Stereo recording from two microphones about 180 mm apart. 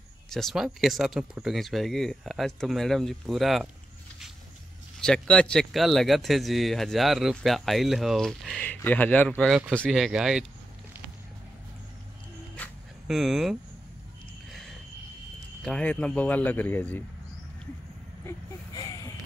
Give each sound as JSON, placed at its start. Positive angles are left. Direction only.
{"t": 0.3, "sound": "speech", "side_deg": 0}
{"t": 5.0, "sound": "speech", "side_deg": 5}
{"t": 13.0, "sound": "speech", "side_deg": 0}
{"t": 15.6, "sound": "speech", "side_deg": 5}
{"t": 18.2, "sound": "a sound", "side_deg": 20}